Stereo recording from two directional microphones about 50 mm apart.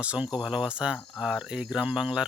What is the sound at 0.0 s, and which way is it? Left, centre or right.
Speech, right.